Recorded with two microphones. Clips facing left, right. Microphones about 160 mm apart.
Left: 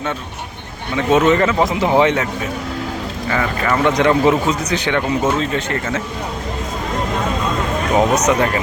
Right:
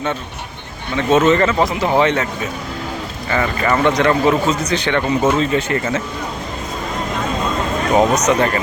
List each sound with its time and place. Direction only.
1.2 s speech: centre (ahead or behind)
1.6 s a man's voice: 15° left (ahead or behind)
3.2 s speech: centre (ahead or behind)
3.9 s a man's voice: 15° left (ahead or behind)
5.2 s speech: 5° right (ahead or behind)
7.9 s a man's voice: 5° left (ahead or behind)